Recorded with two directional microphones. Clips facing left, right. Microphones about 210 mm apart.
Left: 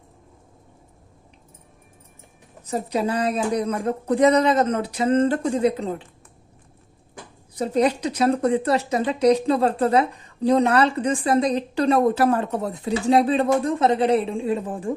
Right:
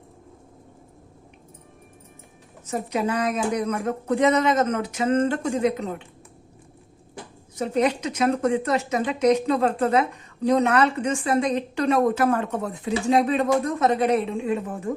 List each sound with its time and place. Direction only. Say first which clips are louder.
2.6 s a woman's voice: left 1 dB; 35° left (ahead or behind)
7.5 s a woman's voice: left 2 dB; 35° left (ahead or behind)